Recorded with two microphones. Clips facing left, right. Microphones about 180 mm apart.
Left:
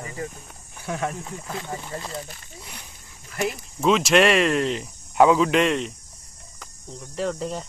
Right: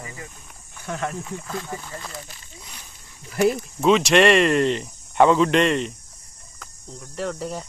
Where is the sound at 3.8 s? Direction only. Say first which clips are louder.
Right 2 dB; centre (ahead or behind).